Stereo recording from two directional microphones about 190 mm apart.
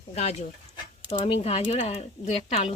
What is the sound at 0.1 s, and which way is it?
Speech, 35° left (ahead or behind).